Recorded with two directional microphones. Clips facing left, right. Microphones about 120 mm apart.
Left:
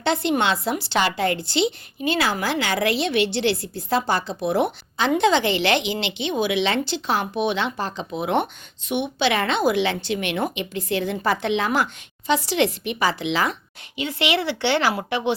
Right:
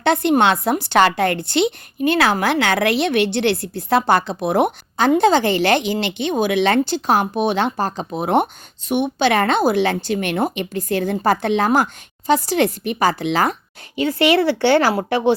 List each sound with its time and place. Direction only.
0.0 s a woman's voice: 55° right (ahead or behind)